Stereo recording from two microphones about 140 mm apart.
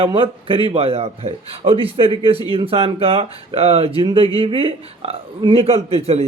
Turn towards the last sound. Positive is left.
turn(degrees=-45)  # may be behind; listen again after turning